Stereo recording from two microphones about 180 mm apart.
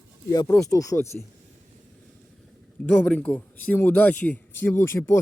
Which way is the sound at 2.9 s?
5° left (ahead or behind).